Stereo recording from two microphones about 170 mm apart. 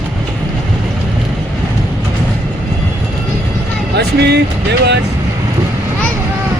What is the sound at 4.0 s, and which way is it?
Speech, 80° right.